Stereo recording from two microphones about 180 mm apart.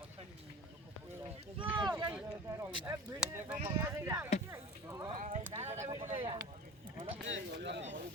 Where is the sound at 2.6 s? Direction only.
15° right (ahead or behind).